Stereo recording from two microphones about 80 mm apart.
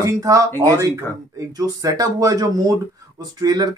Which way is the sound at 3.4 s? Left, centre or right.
Right.